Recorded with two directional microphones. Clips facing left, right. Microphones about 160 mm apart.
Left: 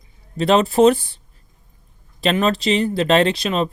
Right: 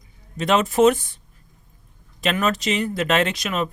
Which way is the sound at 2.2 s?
30° left (ahead or behind).